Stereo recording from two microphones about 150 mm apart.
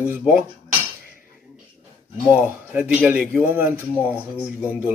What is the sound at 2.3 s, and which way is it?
Speech, 10° right (ahead or behind).